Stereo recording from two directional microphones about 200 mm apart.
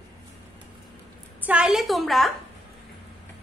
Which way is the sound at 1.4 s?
5° right (ahead or behind).